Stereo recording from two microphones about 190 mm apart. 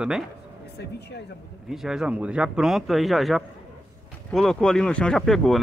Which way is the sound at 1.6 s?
5° right (ahead or behind).